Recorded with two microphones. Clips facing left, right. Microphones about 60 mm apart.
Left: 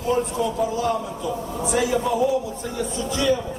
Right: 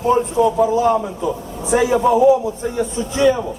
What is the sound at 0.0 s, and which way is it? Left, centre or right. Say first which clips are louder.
A man's voice: right 7 dB; right.